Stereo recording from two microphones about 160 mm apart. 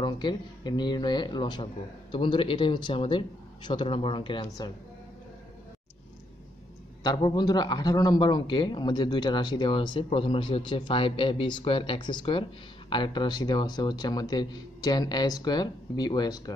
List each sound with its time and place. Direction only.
0.0 s a man's voice: 30° left (ahead or behind)
7.0 s a man's voice: 25° left (ahead or behind)